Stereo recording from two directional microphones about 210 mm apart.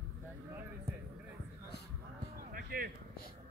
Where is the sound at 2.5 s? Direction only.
45° right (ahead or behind).